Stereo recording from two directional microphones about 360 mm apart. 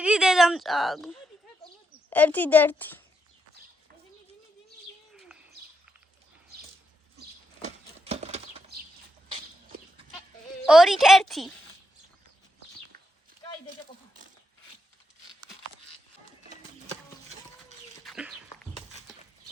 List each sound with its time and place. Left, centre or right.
0.0 s speech: centre
1.6 s a sound: centre
7.6 s horse: centre
10.7 s a woman's voice: centre
16.8 s a sound: centre
18.0 s bird: centre